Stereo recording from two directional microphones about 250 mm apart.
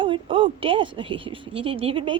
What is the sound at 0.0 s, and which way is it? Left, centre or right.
A woman's voice, centre.